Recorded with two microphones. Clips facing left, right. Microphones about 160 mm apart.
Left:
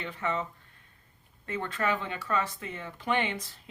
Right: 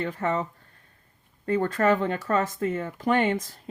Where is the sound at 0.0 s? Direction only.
40° right (ahead or behind).